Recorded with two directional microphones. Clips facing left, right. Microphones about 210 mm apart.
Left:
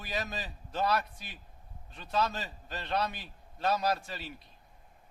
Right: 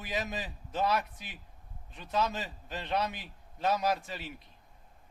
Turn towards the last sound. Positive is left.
turn(degrees=-15)  # may be behind; listen again after turning